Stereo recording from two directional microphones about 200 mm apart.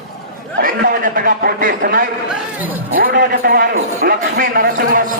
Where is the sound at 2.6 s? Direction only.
10° right (ahead or behind).